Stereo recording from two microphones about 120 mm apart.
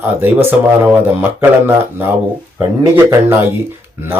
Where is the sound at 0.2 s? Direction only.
15° right (ahead or behind).